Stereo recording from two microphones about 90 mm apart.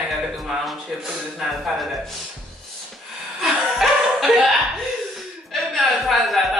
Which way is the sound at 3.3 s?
Centre (ahead or behind).